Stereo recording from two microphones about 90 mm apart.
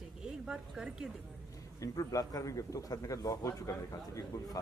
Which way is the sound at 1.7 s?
40° left (ahead or behind).